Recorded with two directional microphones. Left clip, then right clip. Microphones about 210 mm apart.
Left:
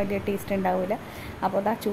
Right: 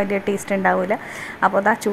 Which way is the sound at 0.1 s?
Centre (ahead or behind).